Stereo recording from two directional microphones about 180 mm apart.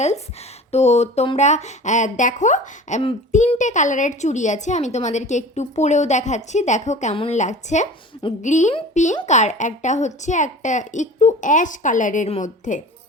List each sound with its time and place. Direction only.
0.7 s a woman's voice: 35° left (ahead or behind)
3.6 s a woman's voice: 45° left (ahead or behind)